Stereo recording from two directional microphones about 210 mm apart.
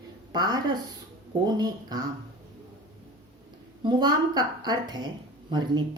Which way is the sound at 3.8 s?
20° right (ahead or behind).